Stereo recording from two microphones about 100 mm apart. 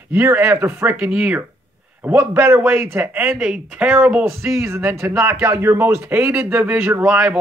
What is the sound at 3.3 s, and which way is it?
Speech, 10° right (ahead or behind).